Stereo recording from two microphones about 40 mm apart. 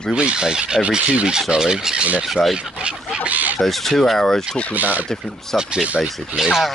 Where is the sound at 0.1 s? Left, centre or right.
Right.